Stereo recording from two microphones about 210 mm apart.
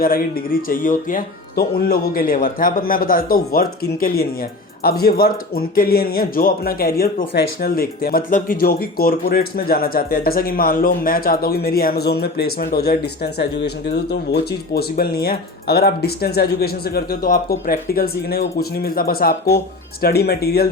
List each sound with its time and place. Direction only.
0.0 s speech: 45° left (ahead or behind)